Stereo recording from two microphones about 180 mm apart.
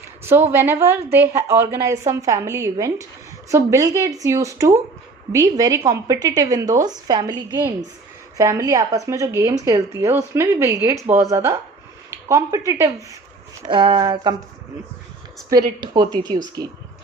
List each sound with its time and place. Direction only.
0.3 s a woman's voice: 10° right (ahead or behind)
8.4 s a woman's voice: 20° right (ahead or behind)
15.4 s a woman's voice: 20° right (ahead or behind)